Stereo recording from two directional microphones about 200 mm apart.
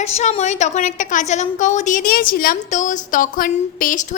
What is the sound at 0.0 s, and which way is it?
A woman's voice, 35° left (ahead or behind).